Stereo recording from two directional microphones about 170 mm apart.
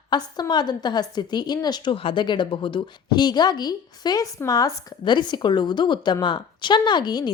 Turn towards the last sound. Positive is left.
turn(degrees=25)  # may be behind; listen again after turning